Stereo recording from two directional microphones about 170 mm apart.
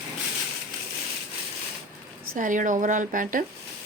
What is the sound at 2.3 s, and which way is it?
A woman's voice, 50° right (ahead or behind).